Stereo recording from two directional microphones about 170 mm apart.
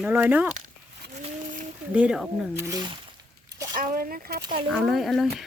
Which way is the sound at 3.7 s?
60° right (ahead or behind).